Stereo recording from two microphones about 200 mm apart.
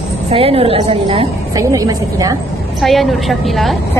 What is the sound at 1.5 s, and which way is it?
Speech, 15° right (ahead or behind).